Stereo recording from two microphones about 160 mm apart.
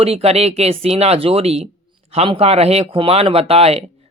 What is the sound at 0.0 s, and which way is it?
Speech, 40° right (ahead or behind).